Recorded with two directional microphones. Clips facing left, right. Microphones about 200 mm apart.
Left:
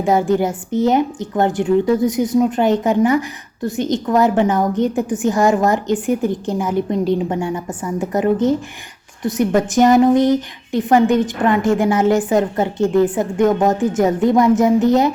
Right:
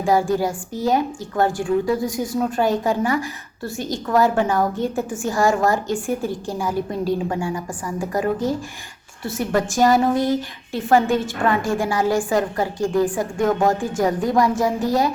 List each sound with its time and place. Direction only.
0.0 s a woman's voice: 20° left (ahead or behind)